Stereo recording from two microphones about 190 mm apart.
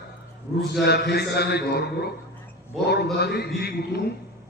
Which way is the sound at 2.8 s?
60° left (ahead or behind).